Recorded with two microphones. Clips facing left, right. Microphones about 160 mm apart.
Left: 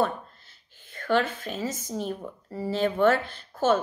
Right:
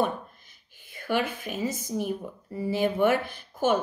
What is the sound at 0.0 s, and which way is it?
A woman's voice, 15° right (ahead or behind).